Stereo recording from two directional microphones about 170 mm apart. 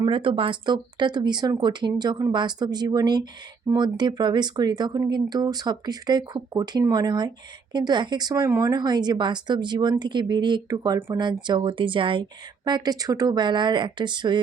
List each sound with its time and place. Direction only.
0.0 s speech: 30° right (ahead or behind)